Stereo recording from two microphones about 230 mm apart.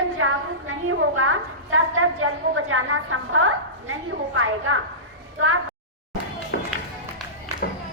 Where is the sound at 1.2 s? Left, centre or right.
Right.